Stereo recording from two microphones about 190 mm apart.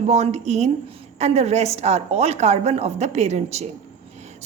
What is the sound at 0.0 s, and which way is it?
A woman's voice, 35° right (ahead or behind).